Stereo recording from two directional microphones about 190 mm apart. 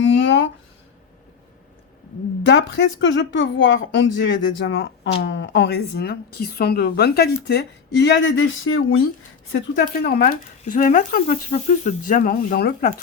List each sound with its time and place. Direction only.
0.0 s a sound: 75° left (ahead or behind)
2.4 s speech: 70° left (ahead or behind); by 9.0 s 90° left
9.5 s speech: 65° left (ahead or behind); by 12.9 s 50° left (ahead or behind)